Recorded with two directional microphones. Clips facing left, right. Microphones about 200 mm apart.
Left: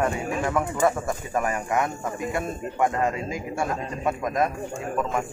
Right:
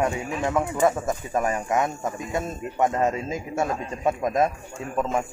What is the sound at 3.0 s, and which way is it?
A man's voice, 25° right (ahead or behind).